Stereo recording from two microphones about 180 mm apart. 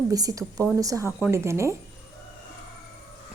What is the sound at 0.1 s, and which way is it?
A woman's voice, 20° right (ahead or behind).